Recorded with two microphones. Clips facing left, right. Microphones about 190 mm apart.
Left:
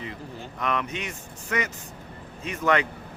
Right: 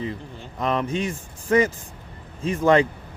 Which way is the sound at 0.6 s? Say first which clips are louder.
Right 6 dB; 30° right (ahead or behind).